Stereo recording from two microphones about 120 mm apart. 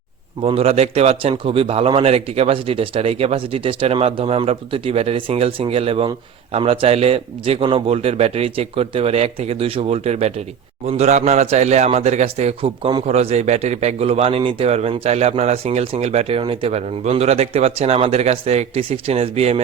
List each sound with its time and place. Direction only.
0.4 s a man's voice: 55° right (ahead or behind)
16.4 s speech: 45° right (ahead or behind)